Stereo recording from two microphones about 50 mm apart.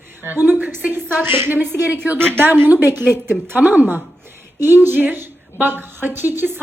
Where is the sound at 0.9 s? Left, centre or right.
Right.